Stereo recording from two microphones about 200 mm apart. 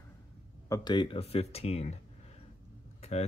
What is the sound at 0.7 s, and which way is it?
Speech, 20° left (ahead or behind).